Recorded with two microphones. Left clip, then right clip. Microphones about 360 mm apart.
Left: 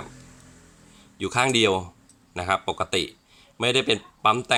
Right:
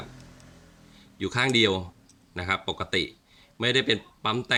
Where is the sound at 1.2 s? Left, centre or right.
Centre.